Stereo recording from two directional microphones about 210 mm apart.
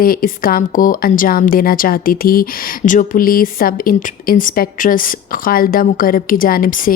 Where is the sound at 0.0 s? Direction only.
45° left (ahead or behind).